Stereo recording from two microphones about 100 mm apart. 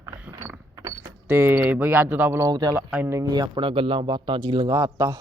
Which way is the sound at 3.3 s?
50° right (ahead or behind).